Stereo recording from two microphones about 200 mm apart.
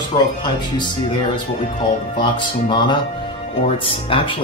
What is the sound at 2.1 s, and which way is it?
Speech, 25° left (ahead or behind).